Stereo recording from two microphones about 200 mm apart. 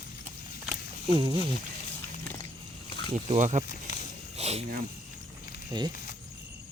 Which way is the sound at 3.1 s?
35° right (ahead or behind).